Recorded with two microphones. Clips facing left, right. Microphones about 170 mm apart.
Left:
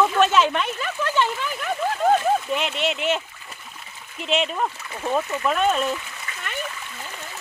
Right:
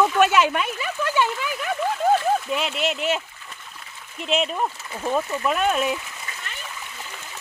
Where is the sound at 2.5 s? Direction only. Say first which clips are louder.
Even; centre (ahead or behind).